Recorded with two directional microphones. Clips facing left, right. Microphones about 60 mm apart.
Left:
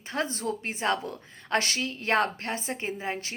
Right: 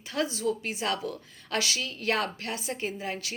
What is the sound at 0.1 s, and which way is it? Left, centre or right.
A woman's voice, left.